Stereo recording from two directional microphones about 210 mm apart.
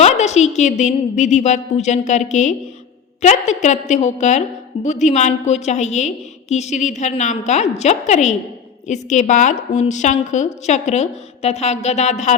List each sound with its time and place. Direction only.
0.0 s a woman's voice: 30° left (ahead or behind)